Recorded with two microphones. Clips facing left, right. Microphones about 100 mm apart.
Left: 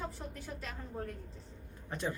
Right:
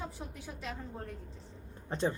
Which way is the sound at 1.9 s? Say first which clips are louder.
Right 5 dB; 25° right (ahead or behind).